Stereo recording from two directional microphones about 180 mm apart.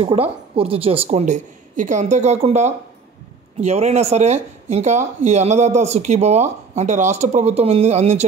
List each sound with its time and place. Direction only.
0.0 s speech: 30° right (ahead or behind)